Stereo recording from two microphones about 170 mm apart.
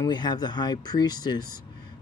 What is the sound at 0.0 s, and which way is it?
Speech, 25° left (ahead or behind).